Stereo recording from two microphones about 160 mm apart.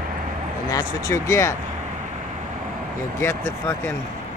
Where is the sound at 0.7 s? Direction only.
20° left (ahead or behind).